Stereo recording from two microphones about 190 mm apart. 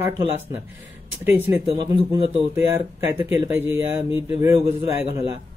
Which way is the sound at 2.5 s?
15° right (ahead or behind).